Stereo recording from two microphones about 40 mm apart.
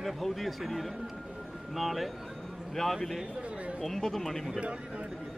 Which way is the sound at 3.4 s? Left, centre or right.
Right.